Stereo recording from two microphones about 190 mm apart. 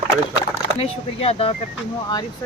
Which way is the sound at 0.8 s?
30° left (ahead or behind).